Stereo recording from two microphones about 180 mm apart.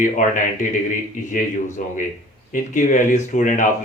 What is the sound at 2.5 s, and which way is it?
Speech, 45° left (ahead or behind).